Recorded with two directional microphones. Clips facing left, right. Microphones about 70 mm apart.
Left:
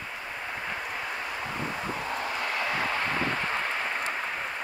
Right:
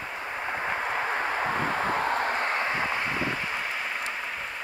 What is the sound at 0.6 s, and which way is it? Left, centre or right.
Vehicle, right.